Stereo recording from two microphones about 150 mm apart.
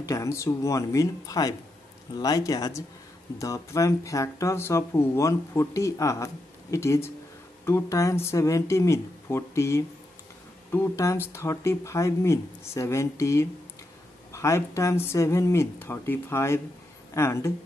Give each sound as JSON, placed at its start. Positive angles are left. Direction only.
{"t": 0.0, "sound": "speech", "side_deg": 20}